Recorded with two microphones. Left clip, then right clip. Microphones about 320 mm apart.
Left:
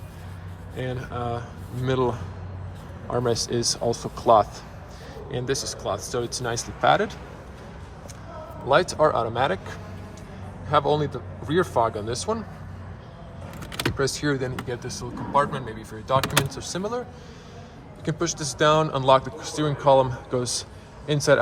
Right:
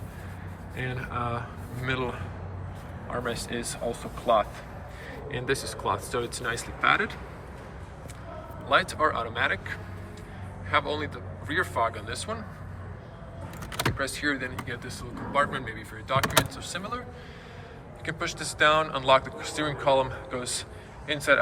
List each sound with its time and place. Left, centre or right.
0.8 s speech: centre
3.2 s speech: centre
5.3 s speech: centre
8.7 s speech: centre
14.1 s speech: centre
18.0 s speech: centre